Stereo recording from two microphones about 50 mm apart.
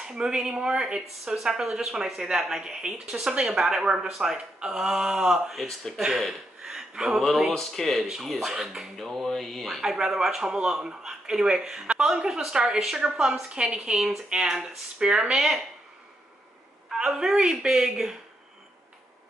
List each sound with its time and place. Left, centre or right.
0.0 s a man's voice: centre
7.2 s speech: centre
9.8 s speech: centre
16.9 s speech: centre